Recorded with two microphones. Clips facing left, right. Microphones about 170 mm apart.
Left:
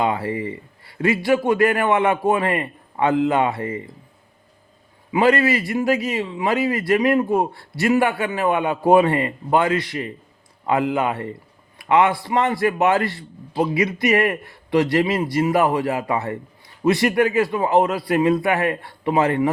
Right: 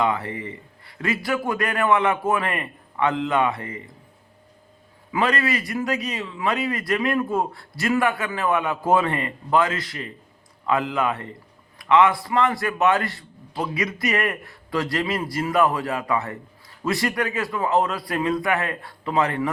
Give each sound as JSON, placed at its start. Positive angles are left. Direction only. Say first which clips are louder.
{"t": 0.0, "sound": "a man's voice", "louder": "left 2 dB", "side_deg": 30}
{"t": 5.1, "sound": "a man's voice", "louder": "left 6 dB", "side_deg": 25}